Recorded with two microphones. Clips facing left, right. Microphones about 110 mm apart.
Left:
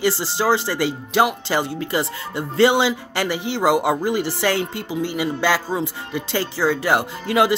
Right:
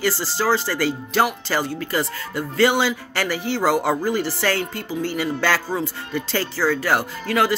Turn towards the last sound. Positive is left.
turn(degrees=20)  # may be behind; listen again after turning